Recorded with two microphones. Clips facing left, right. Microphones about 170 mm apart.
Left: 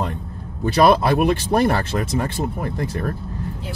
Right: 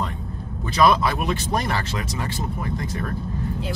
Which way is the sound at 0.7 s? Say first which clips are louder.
Left 4 dB; 55° left (ahead or behind).